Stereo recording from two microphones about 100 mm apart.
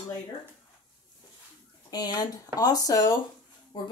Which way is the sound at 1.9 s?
40° left (ahead or behind).